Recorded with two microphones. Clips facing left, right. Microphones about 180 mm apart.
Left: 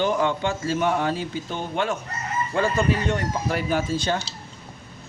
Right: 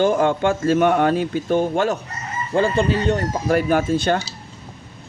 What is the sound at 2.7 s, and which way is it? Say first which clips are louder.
Speech: right 4 dB; 30° right (ahead or behind).